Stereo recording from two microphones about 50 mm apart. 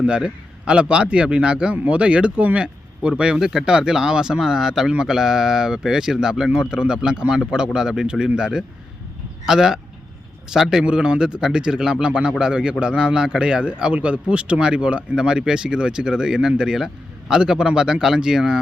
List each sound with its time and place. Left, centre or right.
0.2 s speech: centre